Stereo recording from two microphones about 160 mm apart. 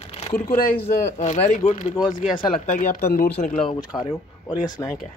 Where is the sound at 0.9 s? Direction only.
45° left (ahead or behind).